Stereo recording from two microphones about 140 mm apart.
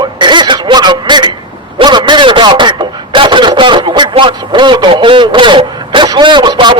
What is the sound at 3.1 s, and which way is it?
Speech, 35° right (ahead or behind).